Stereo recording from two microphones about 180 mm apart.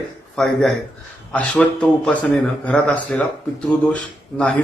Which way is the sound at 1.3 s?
5° left (ahead or behind).